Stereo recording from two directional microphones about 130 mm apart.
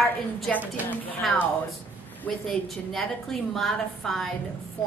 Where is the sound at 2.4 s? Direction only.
5° left (ahead or behind).